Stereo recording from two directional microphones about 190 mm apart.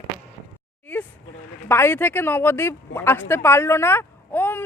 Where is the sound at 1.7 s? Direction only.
10° left (ahead or behind).